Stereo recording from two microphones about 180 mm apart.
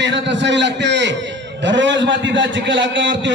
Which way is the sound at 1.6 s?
90° right.